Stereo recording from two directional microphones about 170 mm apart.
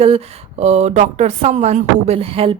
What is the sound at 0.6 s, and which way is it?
Speech, 40° right (ahead or behind).